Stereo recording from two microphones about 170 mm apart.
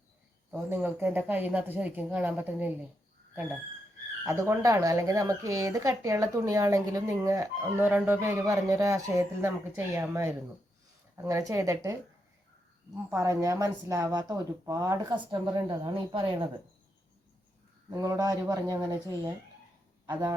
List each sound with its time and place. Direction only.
0.5 s speech: 10° right (ahead or behind)
4.3 s speech: 15° right (ahead or behind)
13.1 s speech: 20° right (ahead or behind)
17.9 s speech: 20° right (ahead or behind)